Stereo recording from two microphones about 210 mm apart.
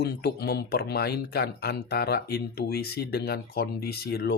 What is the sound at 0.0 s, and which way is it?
Speech, 50° left (ahead or behind).